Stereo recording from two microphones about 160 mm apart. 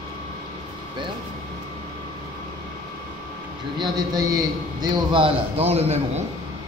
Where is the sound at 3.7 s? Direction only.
25° right (ahead or behind).